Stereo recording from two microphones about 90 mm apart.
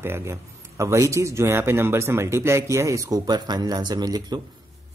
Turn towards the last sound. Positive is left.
turn(degrees=-50)  # may be behind; listen again after turning